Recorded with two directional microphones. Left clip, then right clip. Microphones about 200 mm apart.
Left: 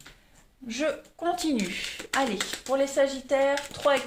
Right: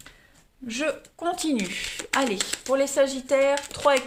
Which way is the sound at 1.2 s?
25° right (ahead or behind).